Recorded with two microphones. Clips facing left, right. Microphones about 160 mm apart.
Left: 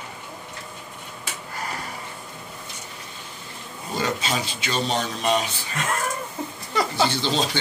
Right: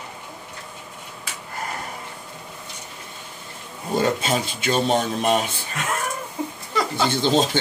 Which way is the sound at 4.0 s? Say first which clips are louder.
Right 4 dB; 50° right (ahead or behind).